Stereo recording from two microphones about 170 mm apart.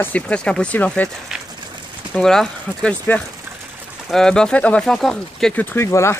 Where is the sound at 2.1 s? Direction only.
5° left (ahead or behind).